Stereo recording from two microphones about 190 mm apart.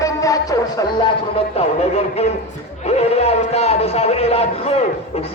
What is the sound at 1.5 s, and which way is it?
A man's voice, 35° left (ahead or behind).